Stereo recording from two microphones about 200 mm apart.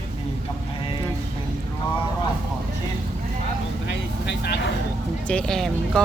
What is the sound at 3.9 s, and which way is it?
Vehicle, 55° left (ahead or behind).